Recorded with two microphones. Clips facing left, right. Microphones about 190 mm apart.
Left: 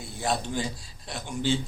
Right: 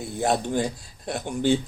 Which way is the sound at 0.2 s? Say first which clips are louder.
Right 5 dB; 55° right (ahead or behind).